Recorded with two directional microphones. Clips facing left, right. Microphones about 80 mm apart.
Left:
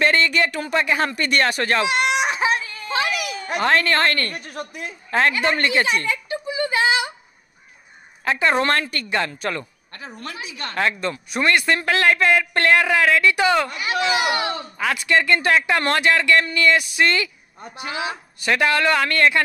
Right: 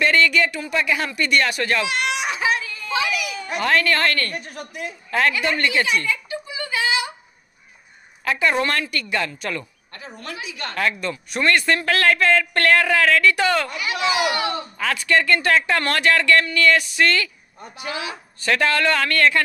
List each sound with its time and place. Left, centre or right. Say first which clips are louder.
0.0 s a woman's voice: right 1 dB; left
2.0 s a sound: left 2 dB; left
3.6 s a woman's voice: left 1 dB; left
5.1 s a sound: left 1 dB; left
8.2 s a woman's voice: left 1 dB; left
11.3 s speech: even; centre
13.7 s speech: left 1 dB; left